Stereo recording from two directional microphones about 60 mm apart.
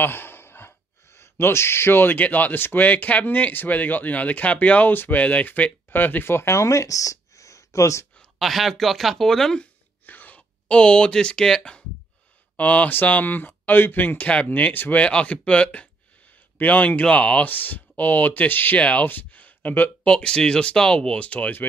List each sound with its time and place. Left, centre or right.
0.0 s speech: left
4.9 s speech: left
8.4 s speech: centre
10.0 s speech: left
12.5 s speech: left
15.0 s speech: centre
18.8 s speech: centre
19.0 s a sound: left
20.1 s speech: centre